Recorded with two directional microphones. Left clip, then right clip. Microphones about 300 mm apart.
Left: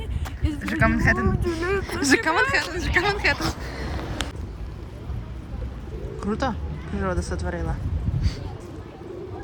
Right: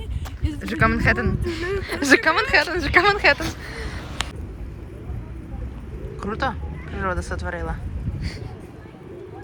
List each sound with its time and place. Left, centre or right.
0.4 s speech: centre
1.6 s speech: left
2.2 s speech: centre
6.1 s speech: centre